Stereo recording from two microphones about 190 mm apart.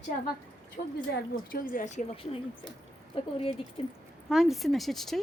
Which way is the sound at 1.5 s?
45° left (ahead or behind).